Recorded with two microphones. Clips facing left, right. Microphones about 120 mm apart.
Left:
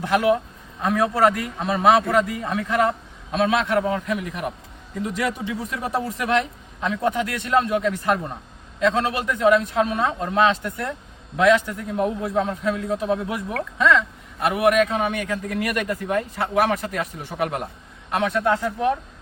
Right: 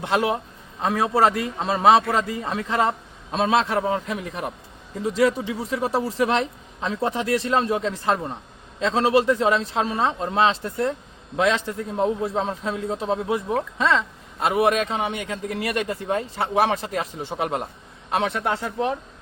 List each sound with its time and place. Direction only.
0.0 s a man's voice: 25° right (ahead or behind)